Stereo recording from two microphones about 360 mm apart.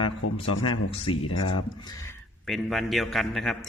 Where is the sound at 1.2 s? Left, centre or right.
Left.